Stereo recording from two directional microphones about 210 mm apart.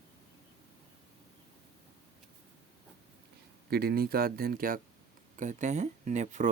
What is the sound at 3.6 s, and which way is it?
Speech, 45° right (ahead or behind).